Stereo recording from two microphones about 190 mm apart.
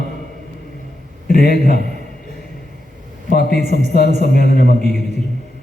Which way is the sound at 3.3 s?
55° left (ahead or behind).